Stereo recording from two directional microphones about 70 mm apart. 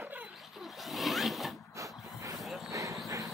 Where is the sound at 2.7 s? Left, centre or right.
Right.